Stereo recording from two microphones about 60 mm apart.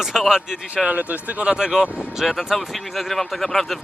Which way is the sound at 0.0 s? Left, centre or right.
Centre.